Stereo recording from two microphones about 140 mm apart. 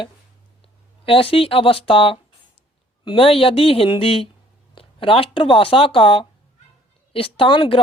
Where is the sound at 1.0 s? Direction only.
40° left (ahead or behind).